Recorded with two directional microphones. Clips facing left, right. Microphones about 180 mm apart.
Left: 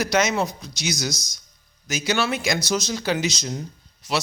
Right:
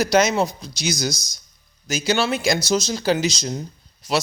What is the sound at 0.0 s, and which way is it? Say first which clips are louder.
A man's voice: right 4 dB; 35° right (ahead or behind).